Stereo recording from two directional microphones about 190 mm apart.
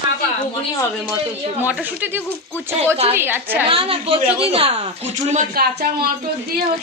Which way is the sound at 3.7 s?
30° right (ahead or behind).